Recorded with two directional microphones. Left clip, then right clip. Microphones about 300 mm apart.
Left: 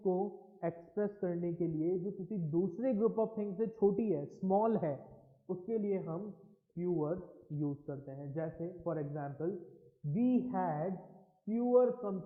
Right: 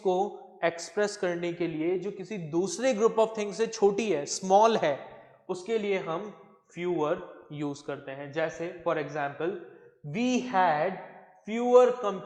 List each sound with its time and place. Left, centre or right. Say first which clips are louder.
0.0 s a man's voice: right 8 dB; right
0.6 s speech: right 10 dB; centre